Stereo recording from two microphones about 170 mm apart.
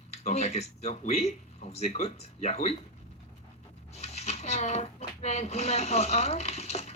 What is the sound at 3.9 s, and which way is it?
Speech, 40° left (ahead or behind).